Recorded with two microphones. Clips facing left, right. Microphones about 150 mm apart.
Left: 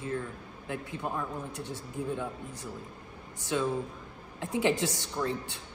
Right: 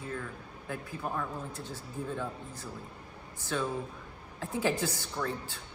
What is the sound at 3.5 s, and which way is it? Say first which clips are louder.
A man's voice: left 3 dB; 15° left (ahead or behind).